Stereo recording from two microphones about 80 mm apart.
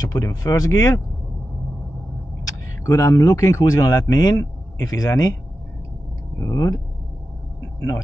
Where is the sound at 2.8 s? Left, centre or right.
Left.